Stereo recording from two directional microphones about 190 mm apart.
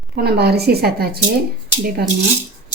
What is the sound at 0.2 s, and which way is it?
A woman's voice, 55° right (ahead or behind).